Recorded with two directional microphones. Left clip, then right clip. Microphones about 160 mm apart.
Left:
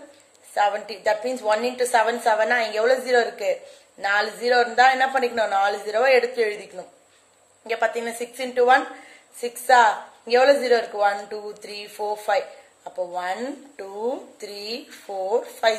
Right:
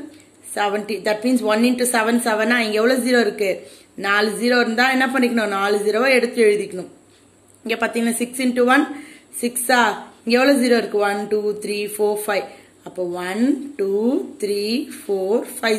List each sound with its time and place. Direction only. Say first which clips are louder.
0.6 s a woman's voice: right 1 dB; 15° right (ahead or behind)